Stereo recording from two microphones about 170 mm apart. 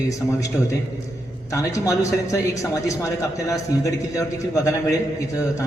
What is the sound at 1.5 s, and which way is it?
Speech, 20° left (ahead or behind).